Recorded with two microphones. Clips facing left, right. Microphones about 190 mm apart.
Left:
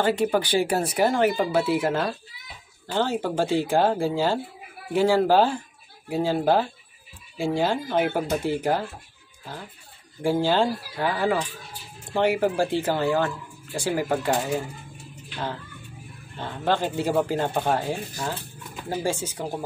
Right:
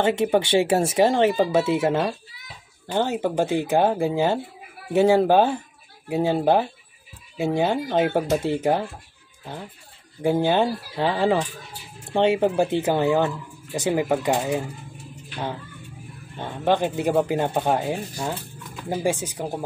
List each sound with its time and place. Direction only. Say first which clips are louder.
0.0 s speech: right 2 dB; 25° right (ahead or behind)
10.2 s speech: right 2 dB; 20° right (ahead or behind)